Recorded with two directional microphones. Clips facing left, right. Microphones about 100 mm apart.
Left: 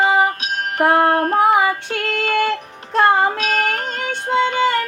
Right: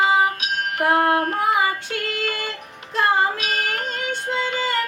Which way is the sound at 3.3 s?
40° left (ahead or behind).